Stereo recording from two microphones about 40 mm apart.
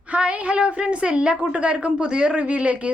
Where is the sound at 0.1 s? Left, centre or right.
Right.